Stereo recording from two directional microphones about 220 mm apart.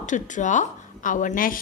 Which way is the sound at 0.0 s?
35° left (ahead or behind).